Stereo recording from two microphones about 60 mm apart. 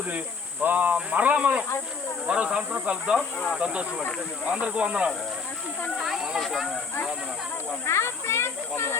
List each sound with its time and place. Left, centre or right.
0.6 s speech: right
6.0 s speech: centre
7.9 s speech: left